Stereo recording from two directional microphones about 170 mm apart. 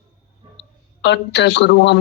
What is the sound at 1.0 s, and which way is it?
Speech, 90° left.